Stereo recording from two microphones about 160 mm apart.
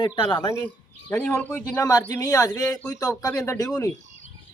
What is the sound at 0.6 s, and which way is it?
A man's voice, 5° left (ahead or behind).